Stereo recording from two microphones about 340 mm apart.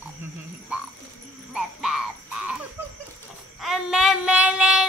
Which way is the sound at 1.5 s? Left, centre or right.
Centre.